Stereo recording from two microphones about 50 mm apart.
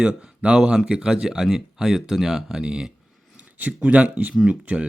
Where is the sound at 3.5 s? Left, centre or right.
Right.